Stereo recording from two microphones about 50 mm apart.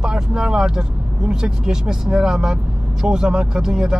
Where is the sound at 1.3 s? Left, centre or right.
Centre.